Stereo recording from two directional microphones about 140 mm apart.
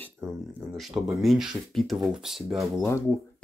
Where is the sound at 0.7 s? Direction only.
Centre (ahead or behind).